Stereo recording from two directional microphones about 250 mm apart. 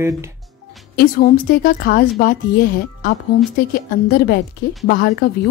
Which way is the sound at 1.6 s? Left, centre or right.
Left.